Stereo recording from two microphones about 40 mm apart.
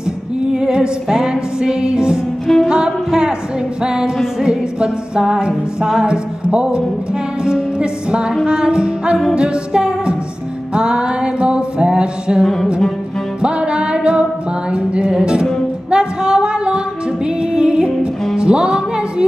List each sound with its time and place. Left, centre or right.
0.5 s music: right
2.4 s music: centre
2.7 s music: centre
15.9 s female singing: right
17.4 s music: right